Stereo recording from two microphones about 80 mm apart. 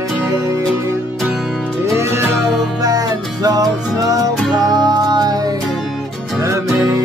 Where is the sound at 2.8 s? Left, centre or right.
Right.